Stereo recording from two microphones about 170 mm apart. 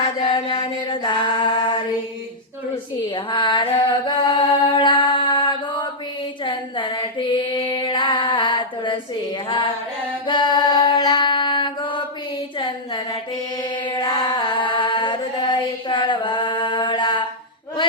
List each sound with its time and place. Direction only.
0.2 s music: 30° left (ahead or behind)
3.2 s mantra: 25° left (ahead or behind)
6.4 s female singing: 30° left (ahead or behind)
10.2 s a sound: 25° left (ahead or behind)
12.5 s mantra: 25° left (ahead or behind)